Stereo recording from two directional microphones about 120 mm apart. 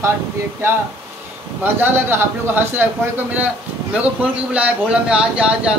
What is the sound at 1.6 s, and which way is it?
A man's voice, 15° right (ahead or behind).